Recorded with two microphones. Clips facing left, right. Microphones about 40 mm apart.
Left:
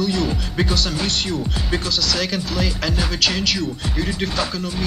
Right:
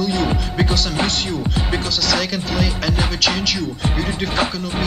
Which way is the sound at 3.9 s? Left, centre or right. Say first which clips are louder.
Right 1 dB; centre.